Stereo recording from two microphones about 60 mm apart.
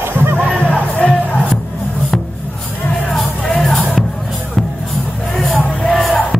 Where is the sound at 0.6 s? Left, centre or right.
Left.